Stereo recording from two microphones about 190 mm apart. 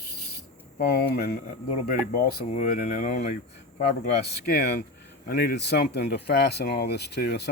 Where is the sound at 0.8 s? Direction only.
55° left (ahead or behind).